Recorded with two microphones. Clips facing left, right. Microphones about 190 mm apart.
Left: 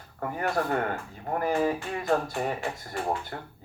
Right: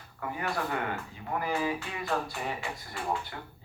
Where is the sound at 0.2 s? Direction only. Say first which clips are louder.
Left 5 dB; 45° left (ahead or behind).